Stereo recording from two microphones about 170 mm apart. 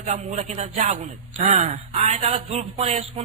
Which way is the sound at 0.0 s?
40° right (ahead or behind).